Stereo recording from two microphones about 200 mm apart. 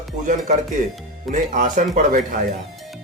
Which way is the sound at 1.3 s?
40° right (ahead or behind).